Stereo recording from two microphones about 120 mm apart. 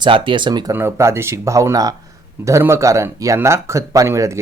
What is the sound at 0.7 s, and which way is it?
Speech, 20° right (ahead or behind).